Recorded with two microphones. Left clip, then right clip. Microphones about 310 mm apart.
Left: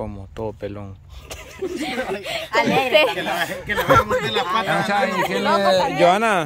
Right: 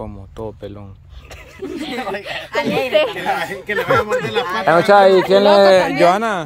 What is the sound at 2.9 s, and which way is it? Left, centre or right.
A man's voice, left.